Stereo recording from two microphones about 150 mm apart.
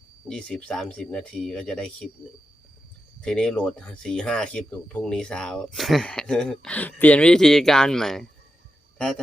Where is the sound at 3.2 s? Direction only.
5° left (ahead or behind).